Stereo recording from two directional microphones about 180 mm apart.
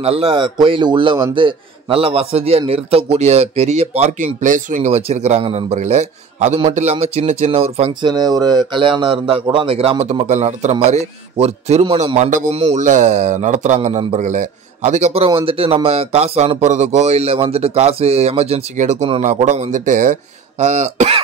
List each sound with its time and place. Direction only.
0.0 s speech: 35° right (ahead or behind)
8.1 s speech: 20° right (ahead or behind); by 21.2 s 40° right (ahead or behind)